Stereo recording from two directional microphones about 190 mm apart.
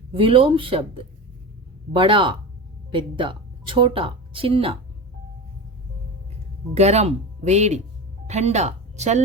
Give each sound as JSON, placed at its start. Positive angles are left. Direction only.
{"t": 0.1, "sound": "speech", "side_deg": -30}
{"t": 6.7, "sound": "speech", "side_deg": -35}